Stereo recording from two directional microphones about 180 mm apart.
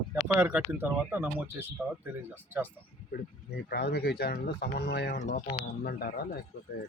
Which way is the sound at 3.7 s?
60° left (ahead or behind).